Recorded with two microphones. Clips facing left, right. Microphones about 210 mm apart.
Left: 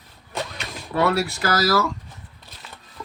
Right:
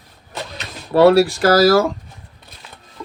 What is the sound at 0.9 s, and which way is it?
Speech, 30° right (ahead or behind).